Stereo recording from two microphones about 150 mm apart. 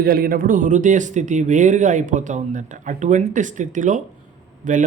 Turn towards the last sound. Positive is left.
turn(degrees=-60)  # may be behind; listen again after turning